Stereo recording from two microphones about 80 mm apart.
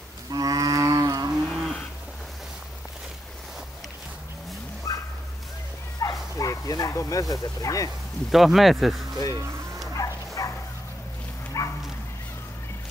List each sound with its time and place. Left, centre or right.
0.3 s cattle: right
1.5 s livestock: centre
4.9 s bow-wow: left
6.3 s a sound: left
8.3 s speech: centre
9.9 s bow-wow: left
11.6 s dog: left